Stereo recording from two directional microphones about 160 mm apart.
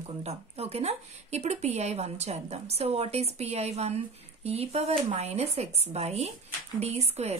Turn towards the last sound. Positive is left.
turn(degrees=-40)  # may be behind; listen again after turning